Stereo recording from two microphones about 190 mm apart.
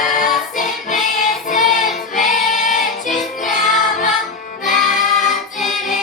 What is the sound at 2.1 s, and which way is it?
Choir, 45° left (ahead or behind).